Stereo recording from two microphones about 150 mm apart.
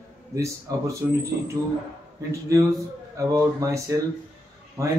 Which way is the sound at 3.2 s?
20° right (ahead or behind).